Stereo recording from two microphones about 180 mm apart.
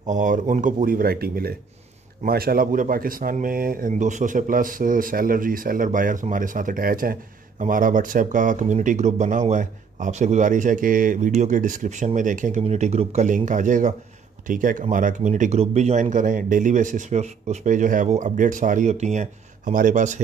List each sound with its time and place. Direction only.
0.0 s speech: 45° right (ahead or behind)